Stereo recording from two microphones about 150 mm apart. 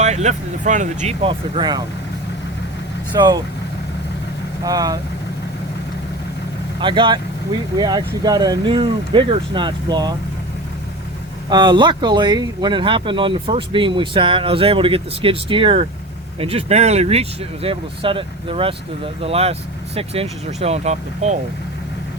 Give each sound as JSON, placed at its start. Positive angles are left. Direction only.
{"t": 0.0, "sound": "speech", "side_deg": -50}
{"t": 1.2, "sound": "speech", "side_deg": -35}
{"t": 3.1, "sound": "speech", "side_deg": -30}
{"t": 4.6, "sound": "speech", "side_deg": -25}
{"t": 6.7, "sound": "speech", "side_deg": -35}
{"t": 11.4, "sound": "speech", "side_deg": -30}